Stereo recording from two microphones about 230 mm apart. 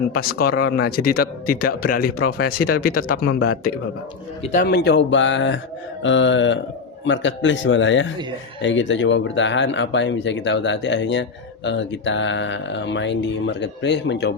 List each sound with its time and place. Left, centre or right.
0.3 s speech: left
4.5 s speech: left